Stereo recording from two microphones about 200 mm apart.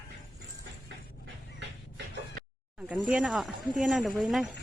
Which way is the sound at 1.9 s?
55° right (ahead or behind).